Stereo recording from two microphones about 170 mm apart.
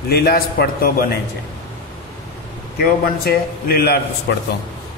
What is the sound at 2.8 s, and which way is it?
A man's voice, 60° left (ahead or behind).